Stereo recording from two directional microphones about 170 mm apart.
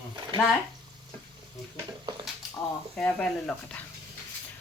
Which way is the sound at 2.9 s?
5° left (ahead or behind).